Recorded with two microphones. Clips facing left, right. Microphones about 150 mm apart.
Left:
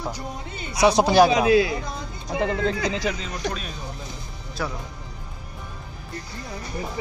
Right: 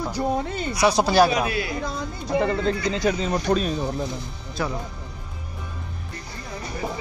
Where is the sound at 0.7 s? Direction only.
20° left (ahead or behind).